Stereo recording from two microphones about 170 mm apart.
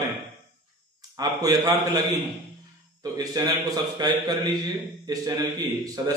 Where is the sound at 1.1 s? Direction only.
20° right (ahead or behind).